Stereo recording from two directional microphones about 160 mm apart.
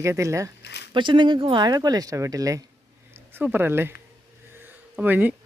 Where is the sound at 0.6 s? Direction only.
90° left.